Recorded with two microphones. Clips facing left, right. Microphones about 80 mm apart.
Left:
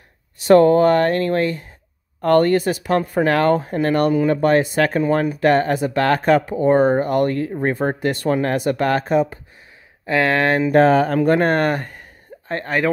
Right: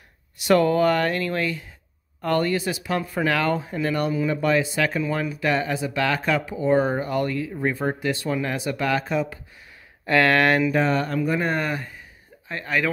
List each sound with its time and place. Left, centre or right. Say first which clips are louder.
0.4 s speech: left 7 dB; left
10.0 s speech: left 1 dB; centre
10.7 s speech: left 8 dB; left
12.4 s speech: left 5 dB; left